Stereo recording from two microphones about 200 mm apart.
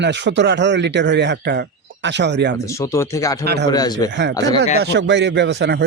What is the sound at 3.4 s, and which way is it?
Speech, 55° right (ahead or behind).